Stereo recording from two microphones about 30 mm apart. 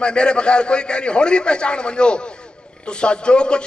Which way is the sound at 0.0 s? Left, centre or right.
Left.